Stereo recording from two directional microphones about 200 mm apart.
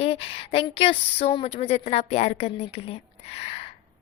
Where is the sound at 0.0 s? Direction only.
30° left (ahead or behind).